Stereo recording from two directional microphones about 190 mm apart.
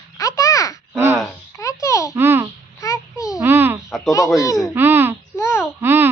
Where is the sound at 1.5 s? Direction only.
15° left (ahead or behind).